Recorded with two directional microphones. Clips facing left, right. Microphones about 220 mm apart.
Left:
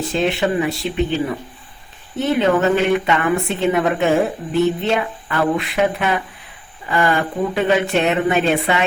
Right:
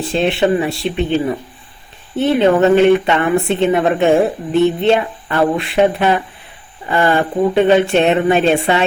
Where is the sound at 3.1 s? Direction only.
30° right (ahead or behind).